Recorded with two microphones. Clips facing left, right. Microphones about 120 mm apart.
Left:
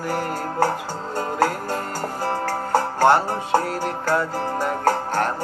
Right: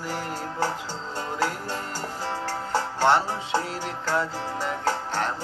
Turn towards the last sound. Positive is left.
turn(degrees=50)  # may be behind; listen again after turning